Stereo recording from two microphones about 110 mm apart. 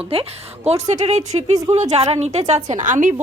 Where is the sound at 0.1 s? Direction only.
65° right (ahead or behind).